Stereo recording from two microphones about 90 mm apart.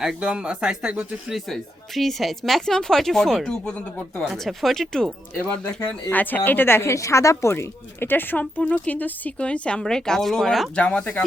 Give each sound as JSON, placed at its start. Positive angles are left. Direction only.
{"t": 0.0, "sound": "speech", "side_deg": -10}
{"t": 2.0, "sound": "speech", "side_deg": 0}
{"t": 5.6, "sound": "a woman's voice", "side_deg": 20}